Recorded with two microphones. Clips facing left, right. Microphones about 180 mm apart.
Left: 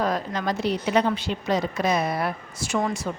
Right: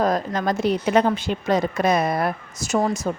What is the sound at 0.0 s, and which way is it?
A woman's voice, 45° right (ahead or behind).